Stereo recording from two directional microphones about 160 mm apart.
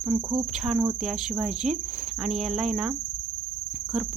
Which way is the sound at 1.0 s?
5° right (ahead or behind).